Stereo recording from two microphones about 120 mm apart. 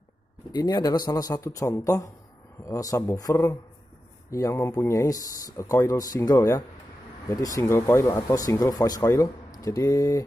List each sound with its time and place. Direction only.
0.5 s speech: 35° left (ahead or behind)